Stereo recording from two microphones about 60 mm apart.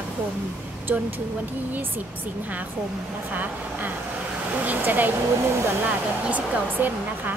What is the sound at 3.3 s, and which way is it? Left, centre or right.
Speech, right.